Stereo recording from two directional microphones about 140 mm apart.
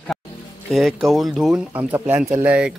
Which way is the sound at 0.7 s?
Centre (ahead or behind).